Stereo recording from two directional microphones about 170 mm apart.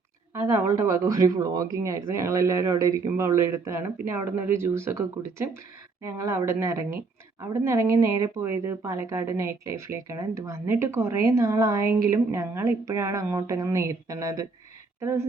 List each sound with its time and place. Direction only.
0.4 s a woman's voice: 15° right (ahead or behind)